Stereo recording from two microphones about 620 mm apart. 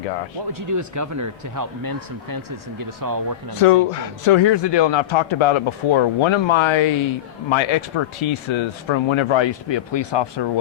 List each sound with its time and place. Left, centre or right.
0.7 s speech: right
3.5 s a man's voice: left